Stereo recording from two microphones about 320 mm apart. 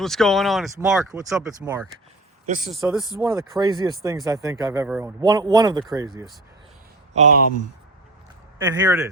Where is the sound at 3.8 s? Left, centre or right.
Centre.